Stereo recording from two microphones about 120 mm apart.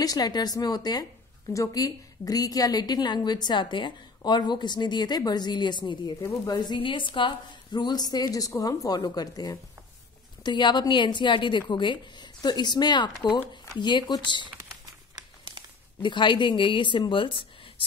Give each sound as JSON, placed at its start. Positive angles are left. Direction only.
{"t": 0.0, "sound": "a woman's voice", "side_deg": 35}
{"t": 15.1, "sound": "crumpling", "side_deg": -40}
{"t": 16.0, "sound": "a woman's voice", "side_deg": 40}